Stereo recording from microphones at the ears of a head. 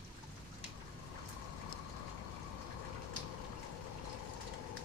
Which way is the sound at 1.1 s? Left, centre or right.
Left.